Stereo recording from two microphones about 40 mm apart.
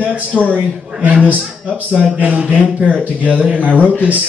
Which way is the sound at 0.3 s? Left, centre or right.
Centre.